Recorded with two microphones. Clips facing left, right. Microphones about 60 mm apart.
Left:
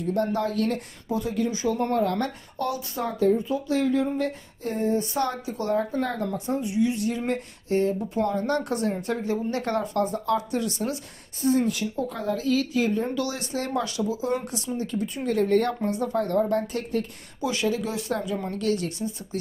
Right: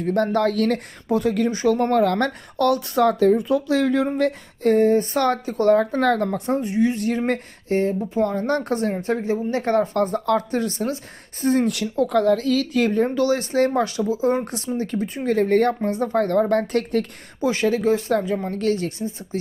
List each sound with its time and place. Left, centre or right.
0.0 s speech: right
5.7 s speech: right
6.2 s speech: right
6.6 s speech: right
7.1 s speech: right
7.7 s speech: right
11.4 s speech: right
13.1 s speech: right
16.1 s speech: right
17.4 s speech: right